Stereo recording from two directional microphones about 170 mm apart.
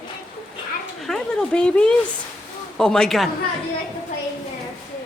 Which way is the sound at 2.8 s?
5° left (ahead or behind).